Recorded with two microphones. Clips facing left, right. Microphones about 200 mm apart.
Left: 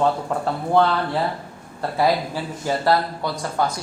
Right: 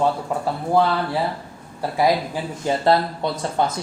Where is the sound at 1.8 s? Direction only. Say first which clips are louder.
Right 1 dB; 15° right (ahead or behind).